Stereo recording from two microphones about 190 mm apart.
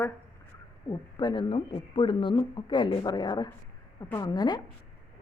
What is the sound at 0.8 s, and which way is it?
Speech, 25° left (ahead or behind).